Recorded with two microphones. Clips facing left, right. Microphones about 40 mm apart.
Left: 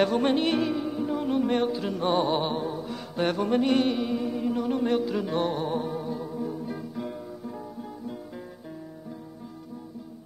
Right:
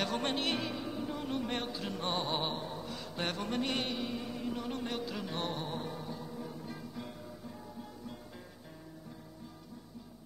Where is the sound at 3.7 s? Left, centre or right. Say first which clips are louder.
Left 11 dB; centre.